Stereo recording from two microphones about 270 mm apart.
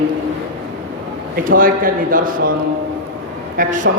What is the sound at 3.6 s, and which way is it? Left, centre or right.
Speech, right.